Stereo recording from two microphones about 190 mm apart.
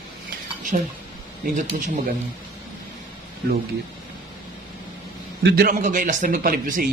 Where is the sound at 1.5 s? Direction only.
40° right (ahead or behind).